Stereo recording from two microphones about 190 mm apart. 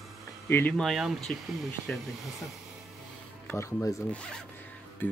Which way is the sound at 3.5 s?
15° left (ahead or behind).